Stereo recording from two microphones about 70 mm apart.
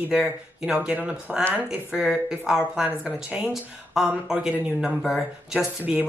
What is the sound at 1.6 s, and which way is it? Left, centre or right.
Speech, centre.